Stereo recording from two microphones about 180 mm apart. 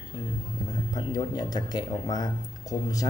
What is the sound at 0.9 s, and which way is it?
Speech, 20° left (ahead or behind).